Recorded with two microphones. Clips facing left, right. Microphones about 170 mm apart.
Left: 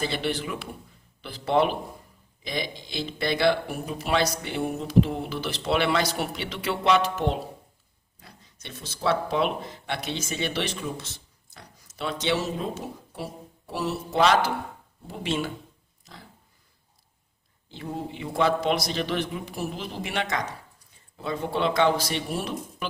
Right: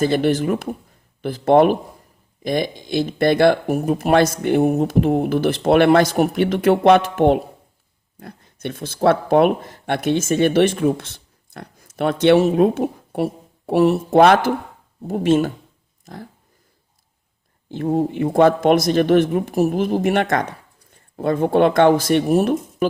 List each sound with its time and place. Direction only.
0.0 s speech: 45° right (ahead or behind)
16.1 s a sound: 50° right (ahead or behind)
17.7 s speech: 50° right (ahead or behind)